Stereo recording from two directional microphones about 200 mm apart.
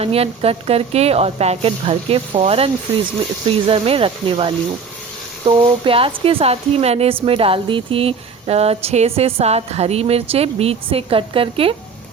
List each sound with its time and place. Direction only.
0.0 s speech: 30° right (ahead or behind)